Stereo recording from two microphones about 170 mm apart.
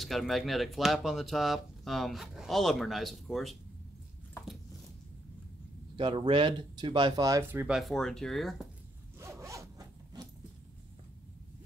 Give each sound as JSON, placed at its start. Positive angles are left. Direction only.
{"t": 0.0, "sound": "speech", "side_deg": 0}
{"t": 5.9, "sound": "speech", "side_deg": -30}
{"t": 7.6, "sound": "speech", "side_deg": 0}
{"t": 9.2, "sound": "zipper", "side_deg": -15}